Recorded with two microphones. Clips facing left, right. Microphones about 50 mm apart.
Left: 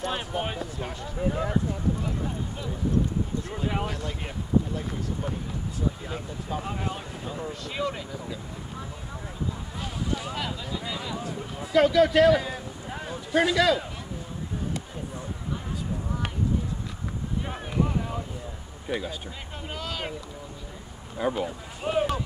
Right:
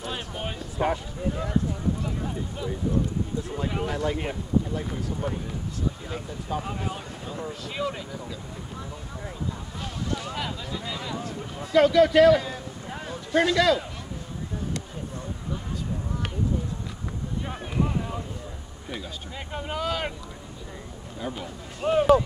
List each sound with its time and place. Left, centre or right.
0.0 s a sound: centre
2.0 s a sound: centre
3.9 s speech: centre
9.8 s a sound: centre
17.5 s boat: centre
18.9 s speech: centre
19.5 s boat: centre
21.2 s speech: centre
21.8 s speech: centre